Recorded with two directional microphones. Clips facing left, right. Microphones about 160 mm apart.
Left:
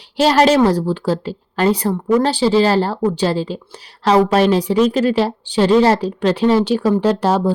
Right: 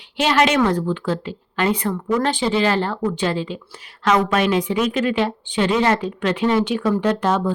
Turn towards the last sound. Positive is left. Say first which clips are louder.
# left 4 dB
turn(degrees=35)  # may be behind; listen again after turning